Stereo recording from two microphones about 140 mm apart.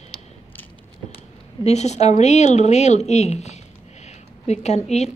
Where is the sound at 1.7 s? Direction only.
55° left (ahead or behind).